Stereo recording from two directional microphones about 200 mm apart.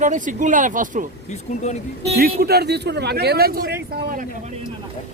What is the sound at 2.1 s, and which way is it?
Speech, 50° right (ahead or behind).